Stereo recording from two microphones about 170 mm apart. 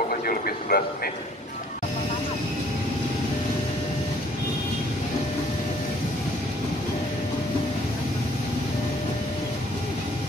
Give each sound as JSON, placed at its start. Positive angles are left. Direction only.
{"t": 0.1, "sound": "vehicle", "side_deg": 55}